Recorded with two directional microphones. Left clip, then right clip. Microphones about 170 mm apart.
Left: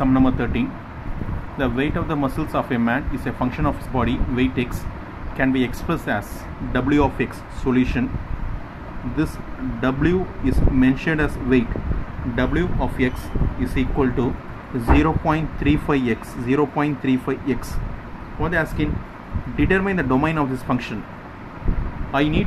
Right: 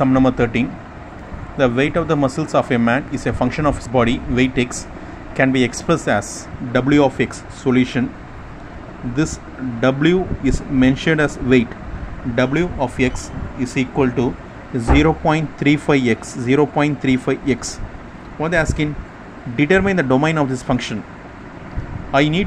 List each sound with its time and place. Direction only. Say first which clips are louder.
0.0 s speech: right 4 dB; 30° right (ahead or behind)
9.8 s speech: right 5 dB; 30° right (ahead or behind)
22.1 s speech: right 5 dB; 30° right (ahead or behind)